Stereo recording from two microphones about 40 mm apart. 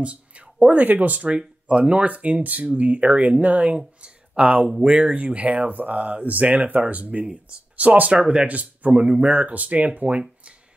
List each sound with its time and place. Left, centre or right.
0.0 s a sound: right
0.7 s speech: right
1.4 s speech: right
2.0 s speech: right
8.2 s speech: centre
8.5 s speech: right